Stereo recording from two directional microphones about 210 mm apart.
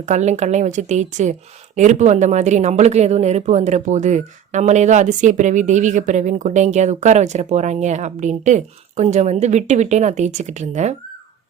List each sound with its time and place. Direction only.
0.0 s a woman's voice: 35° right (ahead or behind)